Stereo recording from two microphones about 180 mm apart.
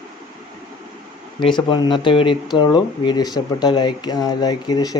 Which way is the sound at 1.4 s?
25° left (ahead or behind).